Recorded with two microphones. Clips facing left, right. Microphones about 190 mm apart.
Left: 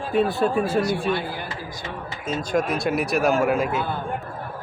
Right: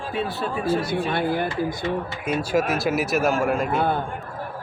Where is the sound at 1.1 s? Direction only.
55° right (ahead or behind).